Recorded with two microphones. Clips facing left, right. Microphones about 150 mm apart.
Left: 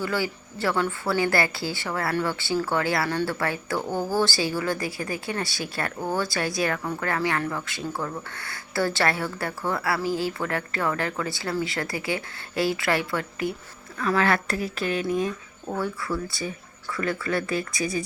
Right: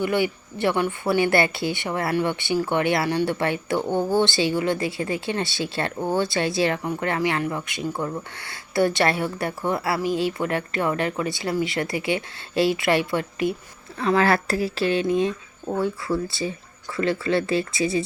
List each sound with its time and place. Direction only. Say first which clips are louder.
0.0 s speech: right 5 dB; 20° right (ahead or behind)